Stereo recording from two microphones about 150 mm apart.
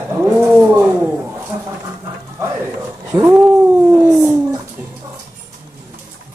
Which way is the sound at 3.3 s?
10° right (ahead or behind).